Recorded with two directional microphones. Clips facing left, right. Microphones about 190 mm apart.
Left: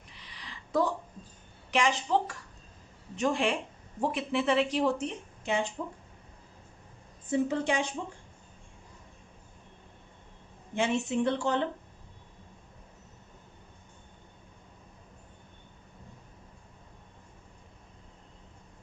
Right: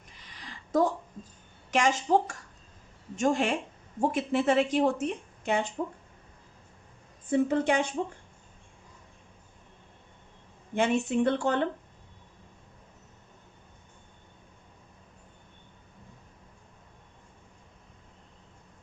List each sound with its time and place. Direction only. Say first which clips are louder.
0.1 s a sound: right 1 dB; 45° right (ahead or behind)
1.7 s speech: right 3 dB; 45° right (ahead or behind)
7.3 s speech: right 3 dB; 55° right (ahead or behind)
10.8 s speech: right 3 dB; 55° right (ahead or behind)